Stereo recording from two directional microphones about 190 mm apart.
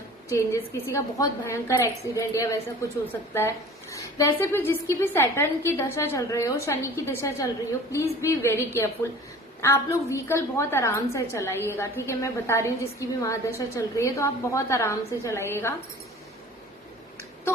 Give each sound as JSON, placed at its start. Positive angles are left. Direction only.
{"t": 0.3, "sound": "a woman's voice", "side_deg": 15}